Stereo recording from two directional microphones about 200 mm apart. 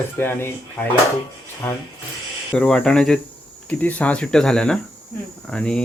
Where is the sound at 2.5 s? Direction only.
5° left (ahead or behind).